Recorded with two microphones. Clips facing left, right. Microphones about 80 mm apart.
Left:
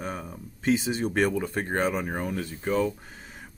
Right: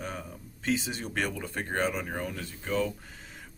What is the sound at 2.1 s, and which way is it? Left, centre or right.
Speech, left.